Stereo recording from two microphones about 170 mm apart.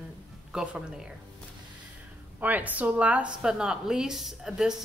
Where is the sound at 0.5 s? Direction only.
5° right (ahead or behind).